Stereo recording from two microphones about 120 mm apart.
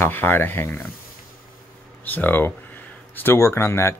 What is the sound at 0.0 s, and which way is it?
Speech, 15° left (ahead or behind).